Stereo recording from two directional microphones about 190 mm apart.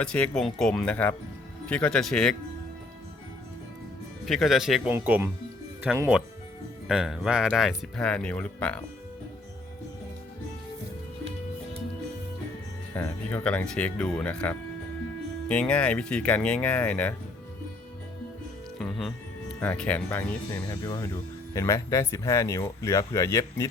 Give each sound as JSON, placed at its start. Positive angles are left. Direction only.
{"t": 0.0, "sound": "speech", "side_deg": 5}
{"t": 4.3, "sound": "speech", "side_deg": 0}
{"t": 13.0, "sound": "speech", "side_deg": 10}
{"t": 18.8, "sound": "music", "side_deg": 0}
{"t": 19.5, "sound": "speech", "side_deg": 5}